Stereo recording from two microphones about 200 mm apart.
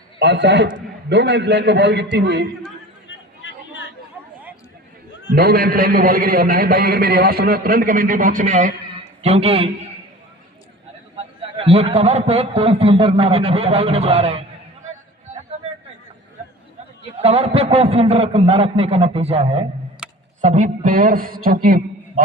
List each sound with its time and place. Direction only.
0.2 s a man's voice: 60° right (ahead or behind)
3.1 s chatter: 65° left (ahead or behind)
5.3 s a man's voice: 50° right (ahead or behind); by 9.7 s 30° right (ahead or behind)
11.5 s a man's voice: 30° right (ahead or behind)
17.2 s a man's voice: 30° right (ahead or behind)
20.0 s tick: 5° right (ahead or behind)
20.4 s a man's voice: 40° right (ahead or behind)